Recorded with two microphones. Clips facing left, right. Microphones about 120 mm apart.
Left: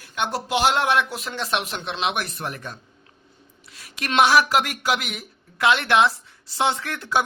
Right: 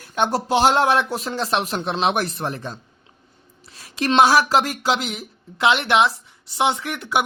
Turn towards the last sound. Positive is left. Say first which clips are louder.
# right 1 dB
turn(degrees=-20)  # may be behind; listen again after turning